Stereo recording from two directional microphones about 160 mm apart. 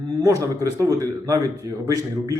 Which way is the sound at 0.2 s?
20° right (ahead or behind).